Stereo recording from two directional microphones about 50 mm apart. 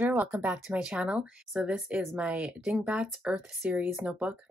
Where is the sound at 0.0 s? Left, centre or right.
Right.